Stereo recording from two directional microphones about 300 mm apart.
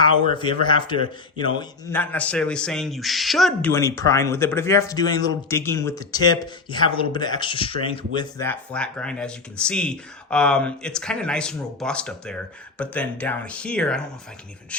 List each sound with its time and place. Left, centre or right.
0.6 s a man's voice: centre